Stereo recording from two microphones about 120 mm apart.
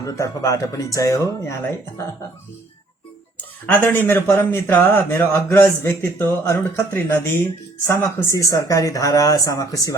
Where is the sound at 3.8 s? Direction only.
15° left (ahead or behind).